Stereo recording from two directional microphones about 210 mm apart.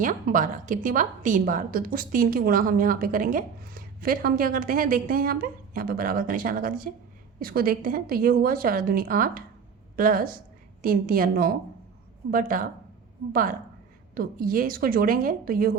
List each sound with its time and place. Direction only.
0.0 s a woman's voice: 40° right (ahead or behind)